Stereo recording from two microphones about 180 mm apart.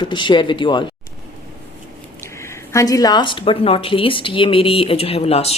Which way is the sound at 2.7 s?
20° left (ahead or behind).